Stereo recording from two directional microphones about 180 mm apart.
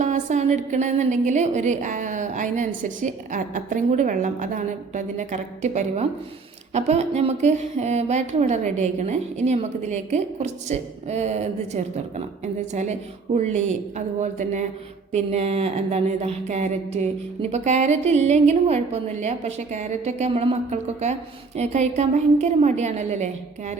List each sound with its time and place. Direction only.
0.0 s a woman's voice: 45° right (ahead or behind)